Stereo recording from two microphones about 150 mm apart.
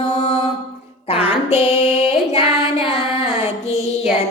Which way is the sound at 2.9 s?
45° left (ahead or behind).